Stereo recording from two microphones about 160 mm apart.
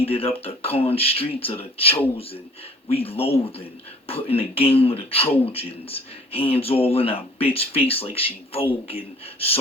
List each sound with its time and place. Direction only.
0.0 s speech: 35° left (ahead or behind)